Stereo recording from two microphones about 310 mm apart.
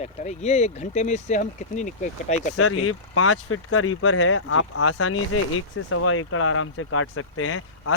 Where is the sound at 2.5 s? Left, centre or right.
Left.